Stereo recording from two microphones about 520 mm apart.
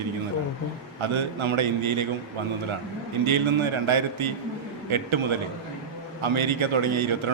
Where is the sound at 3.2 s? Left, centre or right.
Right.